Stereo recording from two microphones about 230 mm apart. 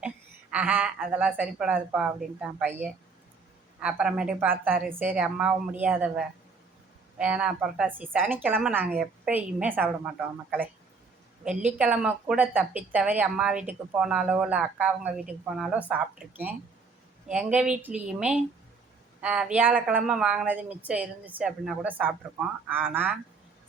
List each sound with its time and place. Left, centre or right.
0.5 s speech: centre